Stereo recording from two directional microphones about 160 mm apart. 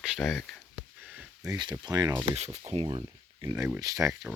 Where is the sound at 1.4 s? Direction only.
25° right (ahead or behind).